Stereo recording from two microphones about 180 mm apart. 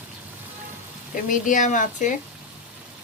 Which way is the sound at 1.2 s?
45° left (ahead or behind).